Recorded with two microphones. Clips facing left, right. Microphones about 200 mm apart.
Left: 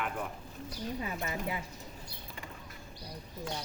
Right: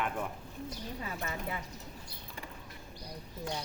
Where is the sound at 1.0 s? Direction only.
15° left (ahead or behind).